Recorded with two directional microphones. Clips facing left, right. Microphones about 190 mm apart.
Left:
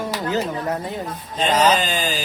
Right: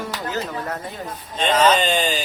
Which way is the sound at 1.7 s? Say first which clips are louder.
Right 2 dB; 5° left (ahead or behind).